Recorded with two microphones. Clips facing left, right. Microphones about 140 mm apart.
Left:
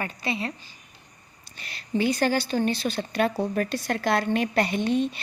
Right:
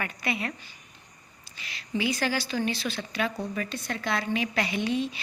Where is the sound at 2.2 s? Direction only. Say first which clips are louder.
Left 5 dB; 50° left (ahead or behind).